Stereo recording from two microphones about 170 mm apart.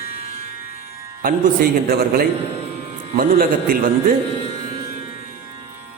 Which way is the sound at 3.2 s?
60° right (ahead or behind).